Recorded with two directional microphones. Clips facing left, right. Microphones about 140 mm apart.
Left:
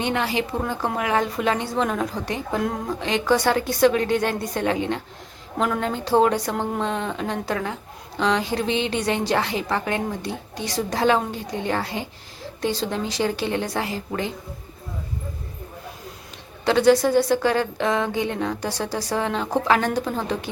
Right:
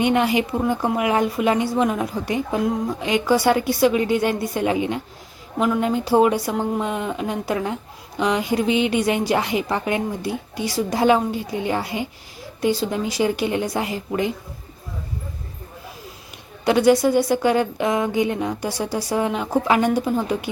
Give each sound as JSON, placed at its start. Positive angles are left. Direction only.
{"t": 0.0, "sound": "a woman's voice", "side_deg": -15}
{"t": 16.6, "sound": "a woman's voice", "side_deg": -10}